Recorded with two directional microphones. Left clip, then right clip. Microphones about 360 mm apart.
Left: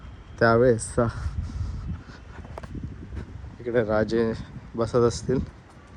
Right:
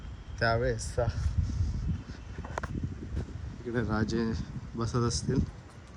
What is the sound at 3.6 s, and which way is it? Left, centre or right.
Speech, centre.